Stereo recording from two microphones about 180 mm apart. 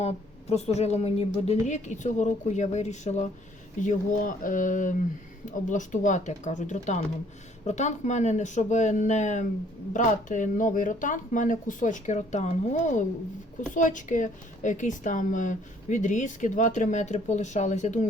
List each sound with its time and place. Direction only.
0.0 s a woman's voice: 35° left (ahead or behind)